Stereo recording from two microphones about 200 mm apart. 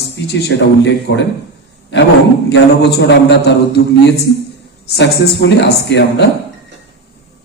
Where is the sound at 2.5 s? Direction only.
60° left (ahead or behind).